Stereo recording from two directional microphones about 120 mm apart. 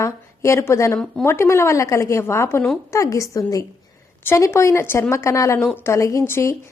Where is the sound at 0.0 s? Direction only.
25° left (ahead or behind).